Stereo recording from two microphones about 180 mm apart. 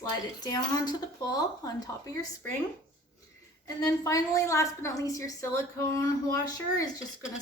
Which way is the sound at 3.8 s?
20° left (ahead or behind).